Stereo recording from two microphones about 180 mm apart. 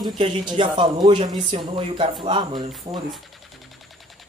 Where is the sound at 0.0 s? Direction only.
25° right (ahead or behind).